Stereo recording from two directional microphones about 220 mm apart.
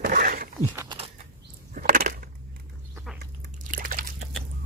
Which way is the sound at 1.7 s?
40° right (ahead or behind).